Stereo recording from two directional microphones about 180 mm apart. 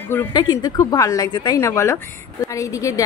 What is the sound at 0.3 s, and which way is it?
A woman's voice, 20° left (ahead or behind).